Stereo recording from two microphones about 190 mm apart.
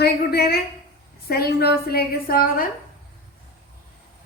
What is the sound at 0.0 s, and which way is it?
A woman's voice, 55° left (ahead or behind).